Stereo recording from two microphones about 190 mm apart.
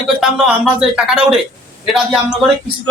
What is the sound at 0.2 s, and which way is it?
Speech, 5° right (ahead or behind).